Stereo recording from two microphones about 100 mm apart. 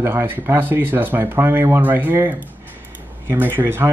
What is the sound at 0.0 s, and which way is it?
Speech, 25° right (ahead or behind).